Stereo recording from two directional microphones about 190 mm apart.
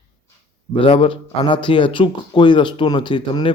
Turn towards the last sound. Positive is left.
turn(degrees=25)  # may be behind; listen again after turning